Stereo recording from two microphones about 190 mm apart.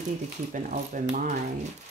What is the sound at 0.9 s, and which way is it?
Speech, 45° right (ahead or behind).